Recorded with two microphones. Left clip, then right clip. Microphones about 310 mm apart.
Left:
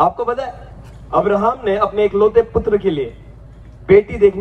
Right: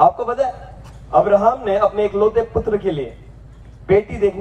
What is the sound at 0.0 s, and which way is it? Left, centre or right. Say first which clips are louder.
A man's voice: right 2 dB; left.